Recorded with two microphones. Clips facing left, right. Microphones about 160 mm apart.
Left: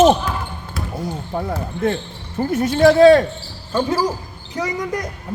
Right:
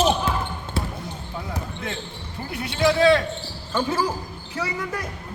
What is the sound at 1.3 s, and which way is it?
Speech, 50° left (ahead or behind).